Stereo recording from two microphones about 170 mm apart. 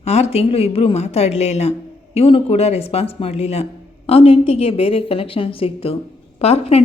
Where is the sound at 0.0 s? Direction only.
40° left (ahead or behind).